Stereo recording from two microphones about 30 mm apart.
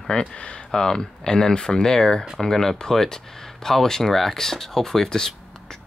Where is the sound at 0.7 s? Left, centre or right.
Left.